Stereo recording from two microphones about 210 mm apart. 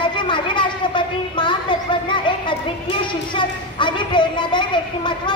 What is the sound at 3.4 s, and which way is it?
A woman's voice, 20° left (ahead or behind).